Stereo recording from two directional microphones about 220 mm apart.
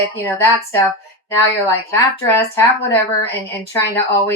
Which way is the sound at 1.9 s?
10° left (ahead or behind).